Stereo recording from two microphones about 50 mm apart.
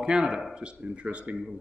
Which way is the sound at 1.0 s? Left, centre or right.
Right.